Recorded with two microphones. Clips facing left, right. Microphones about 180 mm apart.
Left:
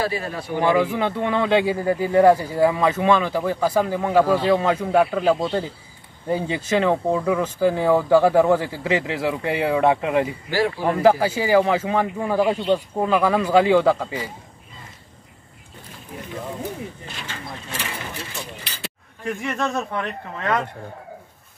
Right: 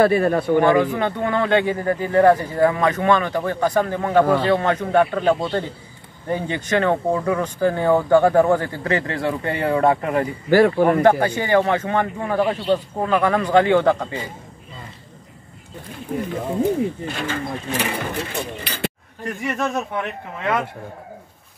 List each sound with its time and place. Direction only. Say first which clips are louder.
0.0 s speech: right 9 dB; 55° right (ahead or behind)
0.6 s speech: left 1 dB; 5° left (ahead or behind)
10.5 s speech: right 9 dB; 55° right (ahead or behind)
11.0 s speech: right 1 dB; 5° left (ahead or behind)
17.1 s speech: right 9 dB; 55° right (ahead or behind)
19.2 s a man's voice: right 1 dB; 5° right (ahead or behind)